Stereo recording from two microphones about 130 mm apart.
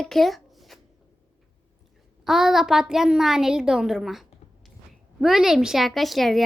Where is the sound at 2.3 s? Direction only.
5° right (ahead or behind).